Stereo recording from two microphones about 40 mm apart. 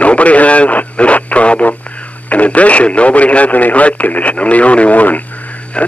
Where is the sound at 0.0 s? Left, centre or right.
Left.